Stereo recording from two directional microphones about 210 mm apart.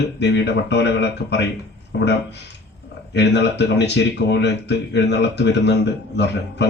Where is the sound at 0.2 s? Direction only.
55° left (ahead or behind).